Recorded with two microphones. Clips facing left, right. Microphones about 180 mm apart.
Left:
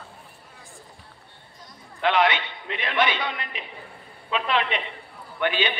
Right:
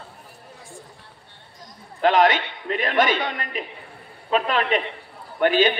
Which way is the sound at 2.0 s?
40° right (ahead or behind).